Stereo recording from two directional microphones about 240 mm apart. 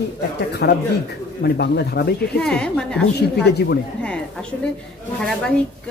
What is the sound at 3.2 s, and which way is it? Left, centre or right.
Speech, left.